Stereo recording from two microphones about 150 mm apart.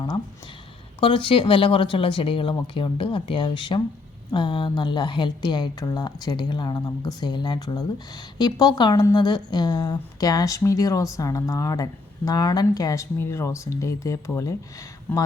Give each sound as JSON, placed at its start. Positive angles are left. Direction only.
{"t": 0.9, "sound": "a woman's voice", "side_deg": 35}